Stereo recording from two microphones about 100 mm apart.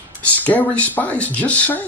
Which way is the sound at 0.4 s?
15° left (ahead or behind).